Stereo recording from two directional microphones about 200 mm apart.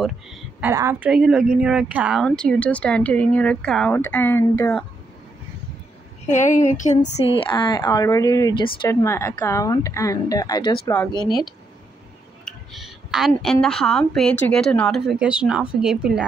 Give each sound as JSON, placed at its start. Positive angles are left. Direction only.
{"t": 0.0, "sound": "speech", "side_deg": -5}
{"t": 6.3, "sound": "a woman's voice", "side_deg": 40}
{"t": 11.2, "sound": "speech", "side_deg": 0}